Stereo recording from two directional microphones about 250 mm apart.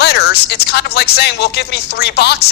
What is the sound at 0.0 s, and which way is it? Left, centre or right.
A woman's voice, left.